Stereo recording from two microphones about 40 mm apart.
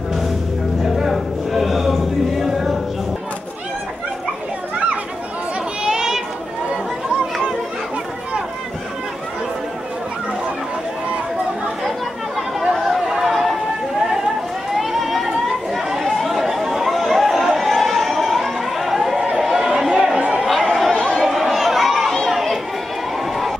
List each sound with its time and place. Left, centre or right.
0.9 s a sound: centre
5.9 s chatter: centre
12.7 s chatter: centre
14.7 s a sound: centre
15.2 s chatter: centre
20.2 s chatter: right
20.4 s chatter: centre
20.9 s chatter: left
21.3 s a sound: centre
22.3 s chatter: centre